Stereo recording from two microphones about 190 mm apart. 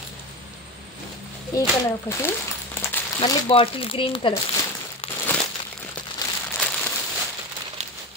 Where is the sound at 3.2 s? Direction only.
30° left (ahead or behind).